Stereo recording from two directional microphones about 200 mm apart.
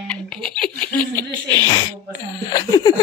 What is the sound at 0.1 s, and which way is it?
Giggle, 5° left (ahead or behind).